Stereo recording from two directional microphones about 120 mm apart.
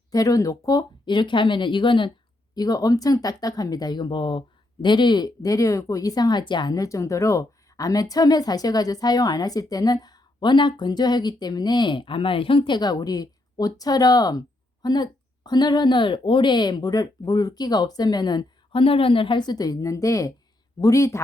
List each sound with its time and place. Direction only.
0.1 s speech: 30° left (ahead or behind)